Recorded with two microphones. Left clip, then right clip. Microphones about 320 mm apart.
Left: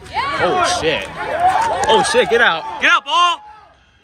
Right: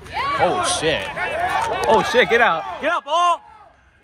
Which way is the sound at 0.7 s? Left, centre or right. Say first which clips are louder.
Left 3 dB; right.